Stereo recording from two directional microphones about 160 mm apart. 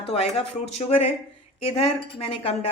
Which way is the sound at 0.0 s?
40° left (ahead or behind).